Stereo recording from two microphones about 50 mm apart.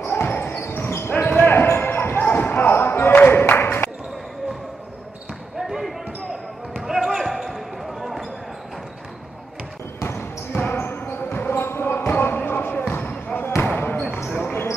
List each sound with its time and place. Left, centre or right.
0.1 s basketball bounce: left
1.1 s basketball bounce: left
5.6 s basketball bounce: centre
10.0 s basketball bounce: left